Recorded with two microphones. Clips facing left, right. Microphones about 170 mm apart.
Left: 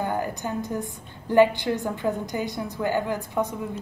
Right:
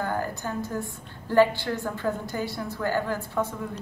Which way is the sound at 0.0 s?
20° left (ahead or behind).